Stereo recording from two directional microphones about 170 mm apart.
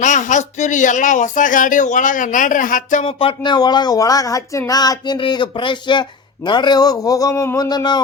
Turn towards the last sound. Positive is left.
turn(degrees=25)  # may be behind; listen again after turning